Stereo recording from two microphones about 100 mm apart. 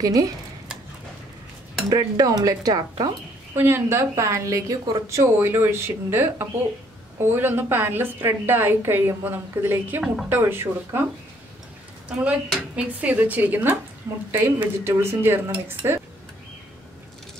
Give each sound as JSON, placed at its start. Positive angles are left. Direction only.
{"t": 0.0, "sound": "speech", "side_deg": -35}
{"t": 1.9, "sound": "speech", "side_deg": -35}
{"t": 3.5, "sound": "a woman's voice", "side_deg": -25}
{"t": 12.1, "sound": "a woman's voice", "side_deg": -15}